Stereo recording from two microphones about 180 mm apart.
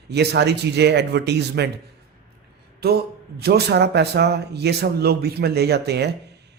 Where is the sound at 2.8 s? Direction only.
60° right (ahead or behind).